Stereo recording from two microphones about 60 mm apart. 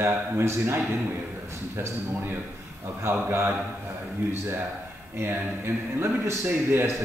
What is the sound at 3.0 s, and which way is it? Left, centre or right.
Speech, right.